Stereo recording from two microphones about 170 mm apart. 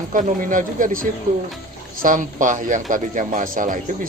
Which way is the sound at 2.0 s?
50° right (ahead or behind).